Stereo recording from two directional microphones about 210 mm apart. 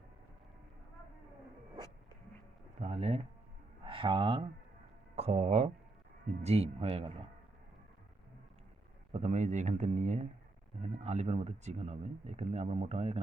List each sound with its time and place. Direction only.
2.8 s a sound: 30° right (ahead or behind)
5.1 s speech: 30° right (ahead or behind)
9.1 s speech: 35° right (ahead or behind)